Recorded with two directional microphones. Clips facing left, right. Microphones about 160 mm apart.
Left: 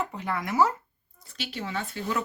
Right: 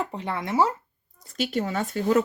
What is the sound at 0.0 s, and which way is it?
Speech, 30° right (ahead or behind).